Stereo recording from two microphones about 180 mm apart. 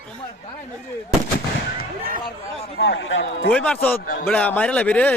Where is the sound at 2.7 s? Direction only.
75° left (ahead or behind); by 3.4 s 90° left.